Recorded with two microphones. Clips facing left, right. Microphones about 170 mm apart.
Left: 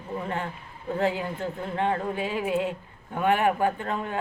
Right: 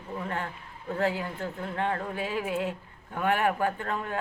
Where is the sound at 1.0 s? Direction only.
15° left (ahead or behind).